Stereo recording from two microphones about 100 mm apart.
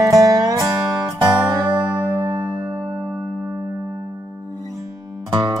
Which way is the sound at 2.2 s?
55° right (ahead or behind).